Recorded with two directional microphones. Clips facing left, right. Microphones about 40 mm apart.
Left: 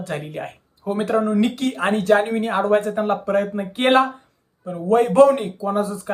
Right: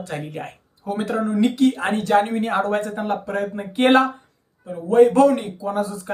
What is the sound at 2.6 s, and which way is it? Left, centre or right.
Speech, centre.